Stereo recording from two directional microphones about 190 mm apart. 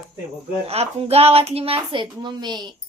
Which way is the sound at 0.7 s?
30° right (ahead or behind).